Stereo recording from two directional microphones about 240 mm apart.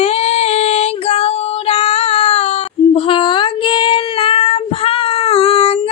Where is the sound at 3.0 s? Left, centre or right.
Left.